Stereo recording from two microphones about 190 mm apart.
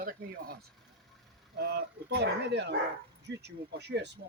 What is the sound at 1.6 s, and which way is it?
Speech, 55° right (ahead or behind).